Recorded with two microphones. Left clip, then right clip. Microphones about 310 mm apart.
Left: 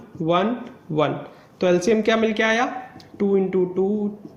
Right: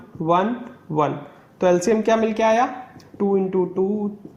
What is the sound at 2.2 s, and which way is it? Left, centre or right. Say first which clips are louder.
Speech: right 2 dB; centre.